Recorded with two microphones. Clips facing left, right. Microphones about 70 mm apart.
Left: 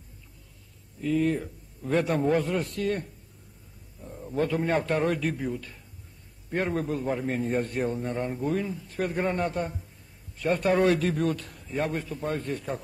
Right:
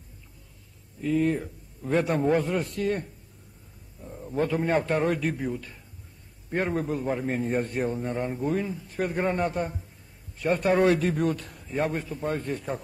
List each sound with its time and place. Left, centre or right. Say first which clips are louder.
1.0 s a man's voice: right 1 dB; centre
4.0 s a sound: right 1 dB; centre
4.4 s a man's voice: right 1 dB; centre